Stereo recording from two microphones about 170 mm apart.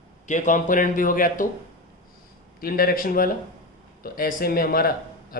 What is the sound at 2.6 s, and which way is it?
Speech, 55° left (ahead or behind).